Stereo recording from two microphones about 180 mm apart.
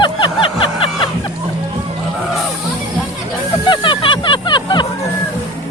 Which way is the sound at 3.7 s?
30° left (ahead or behind).